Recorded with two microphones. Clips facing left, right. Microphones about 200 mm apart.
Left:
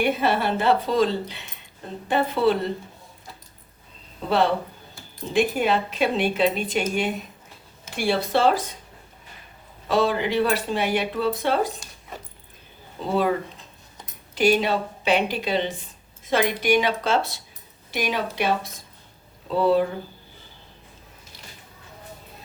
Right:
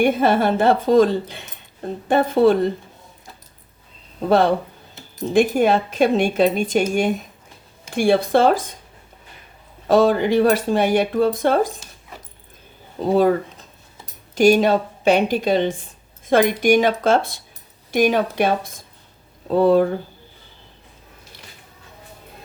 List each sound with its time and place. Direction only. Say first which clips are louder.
0.0 s speech: right 6 dB; 50° right (ahead or behind)
4.3 s speech: right 5 dB; 45° right (ahead or behind)
9.8 s speech: right 6 dB; 45° right (ahead or behind)
13.0 s speech: right 8 dB; 45° right (ahead or behind)
14.3 s speech: right 6 dB; 45° right (ahead or behind)